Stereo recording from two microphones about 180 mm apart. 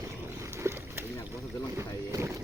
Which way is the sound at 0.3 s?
15° right (ahead or behind).